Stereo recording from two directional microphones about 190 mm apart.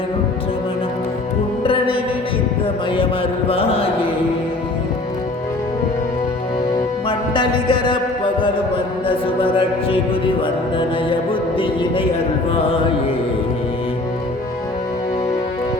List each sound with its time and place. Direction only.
1.6 s music: 25° left (ahead or behind)
3.5 s music: 30° left (ahead or behind)
6.7 s music: 25° left (ahead or behind)
9.0 s speech: 30° left (ahead or behind)
11.5 s speech: 25° left (ahead or behind)